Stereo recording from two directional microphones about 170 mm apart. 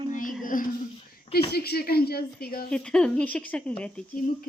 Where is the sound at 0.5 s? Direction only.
50° left (ahead or behind).